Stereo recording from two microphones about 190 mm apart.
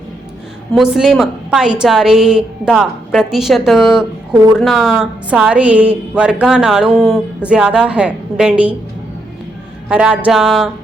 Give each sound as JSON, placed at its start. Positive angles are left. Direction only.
{"t": 0.7, "sound": "a woman's voice", "side_deg": 0}
{"t": 9.9, "sound": "a woman's voice", "side_deg": -5}